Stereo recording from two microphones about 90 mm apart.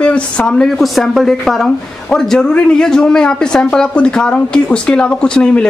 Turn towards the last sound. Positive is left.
turn(degrees=10)  # may be behind; listen again after turning